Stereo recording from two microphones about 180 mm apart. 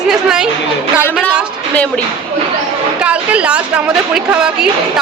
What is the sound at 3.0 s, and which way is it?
A woman's voice, 5° right (ahead or behind).